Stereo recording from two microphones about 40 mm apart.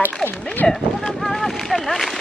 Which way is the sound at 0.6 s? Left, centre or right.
Centre.